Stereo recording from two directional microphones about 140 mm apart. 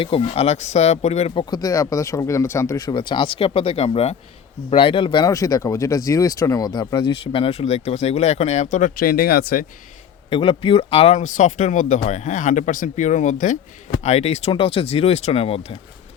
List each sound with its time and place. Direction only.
0.0 s speech: 45° left (ahead or behind)
1.4 s speech: 30° left (ahead or behind)
2.9 s speech: 35° left (ahead or behind); by 9.6 s 90° left
10.2 s speech: 40° left (ahead or behind)
11.2 s speech: 60° left (ahead or behind); by 15.6 s 45° left (ahead or behind)